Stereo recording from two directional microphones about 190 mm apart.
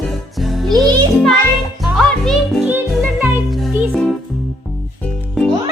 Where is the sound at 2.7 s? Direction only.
10° right (ahead or behind).